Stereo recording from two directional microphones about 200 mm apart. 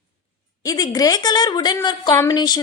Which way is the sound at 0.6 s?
15° left (ahead or behind).